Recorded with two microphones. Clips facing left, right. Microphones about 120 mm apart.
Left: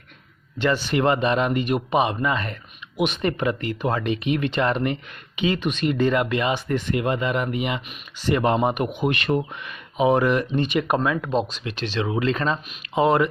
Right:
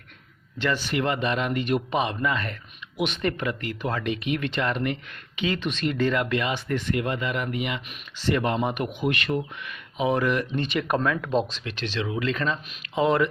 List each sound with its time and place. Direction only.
0.6 s speech: 15° left (ahead or behind)
0.9 s speech: 30° left (ahead or behind)
1.6 s speech: 15° left (ahead or behind)
5.4 s speech: 15° left (ahead or behind)
11.9 s speech: 35° left (ahead or behind)